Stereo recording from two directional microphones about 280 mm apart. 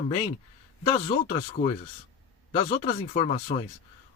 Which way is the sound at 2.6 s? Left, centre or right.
Left.